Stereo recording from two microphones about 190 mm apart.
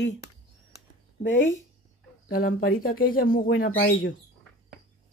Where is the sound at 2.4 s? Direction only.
50° left (ahead or behind).